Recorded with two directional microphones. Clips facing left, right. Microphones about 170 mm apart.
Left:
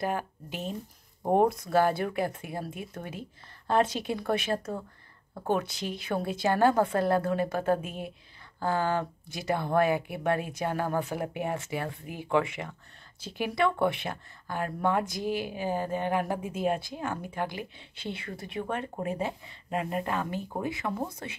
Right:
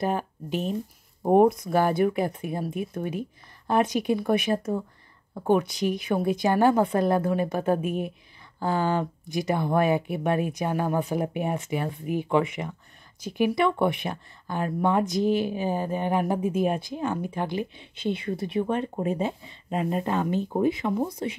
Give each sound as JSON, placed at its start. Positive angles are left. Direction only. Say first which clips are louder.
{"t": 0.0, "sound": "speech", "louder": "right 4 dB", "side_deg": -20}